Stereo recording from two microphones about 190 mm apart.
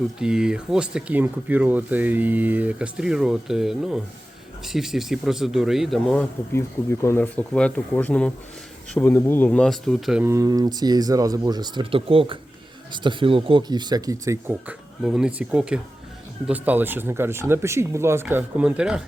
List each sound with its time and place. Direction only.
0.2 s speech: 5° right (ahead or behind)
6.5 s speech: 15° left (ahead or behind)
10.2 s speech: 15° right (ahead or behind)